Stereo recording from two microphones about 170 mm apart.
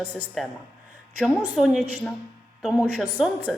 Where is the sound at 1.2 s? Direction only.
Centre (ahead or behind).